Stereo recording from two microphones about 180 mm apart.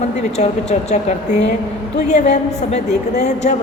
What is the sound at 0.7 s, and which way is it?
A woman's voice, 40° left (ahead or behind).